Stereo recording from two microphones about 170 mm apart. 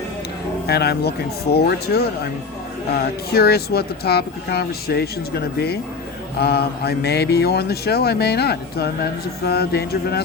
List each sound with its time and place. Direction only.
0.7 s speech: 70° left (ahead or behind)